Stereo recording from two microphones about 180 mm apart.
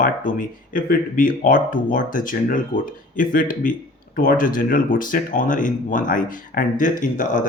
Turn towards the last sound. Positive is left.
turn(degrees=45)  # may be behind; listen again after turning